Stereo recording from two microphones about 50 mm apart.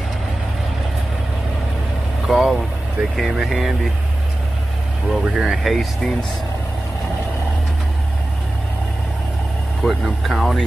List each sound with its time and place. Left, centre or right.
2.2 s vehicle: centre
3.0 s vehicle: right
3.3 s speech: centre
5.1 s speech: centre
9.8 s speech: centre